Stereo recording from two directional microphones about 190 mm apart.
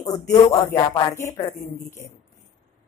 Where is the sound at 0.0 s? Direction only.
20° left (ahead or behind).